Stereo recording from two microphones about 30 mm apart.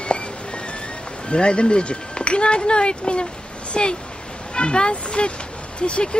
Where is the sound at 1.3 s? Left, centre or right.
Left.